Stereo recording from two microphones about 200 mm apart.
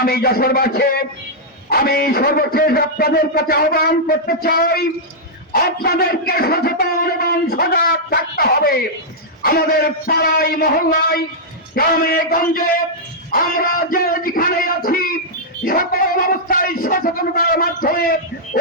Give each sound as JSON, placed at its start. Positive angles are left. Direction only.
{"t": 0.0, "sound": "a man's voice", "side_deg": 50}
{"t": 14.8, "sound": "a sound", "side_deg": 45}
{"t": 15.6, "sound": "a man's voice", "side_deg": 45}